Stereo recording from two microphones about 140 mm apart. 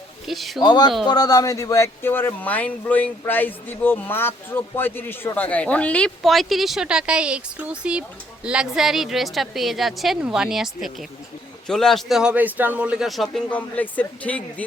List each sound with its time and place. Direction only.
0.3 s a man's voice: centre (ahead or behind)
0.6 s a man's voice: 30° left (ahead or behind); by 14.4 s 10° left (ahead or behind)